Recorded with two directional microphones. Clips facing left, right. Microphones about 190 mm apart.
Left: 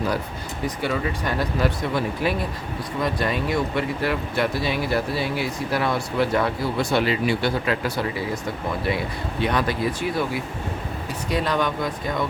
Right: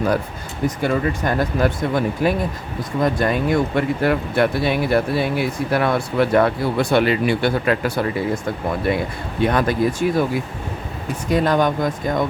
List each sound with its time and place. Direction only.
0.8 s speech: 50° right (ahead or behind)
9.4 s speech: 50° right (ahead or behind)
11.3 s speech: 45° right (ahead or behind)